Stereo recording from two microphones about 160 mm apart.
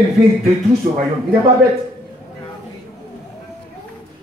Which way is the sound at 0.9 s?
50° right (ahead or behind).